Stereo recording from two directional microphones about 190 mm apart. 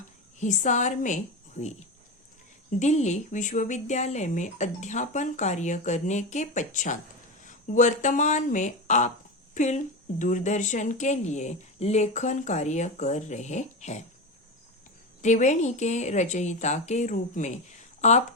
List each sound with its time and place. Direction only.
0.3 s a woman's voice: 40° left (ahead or behind)
15.2 s a woman's voice: 40° left (ahead or behind)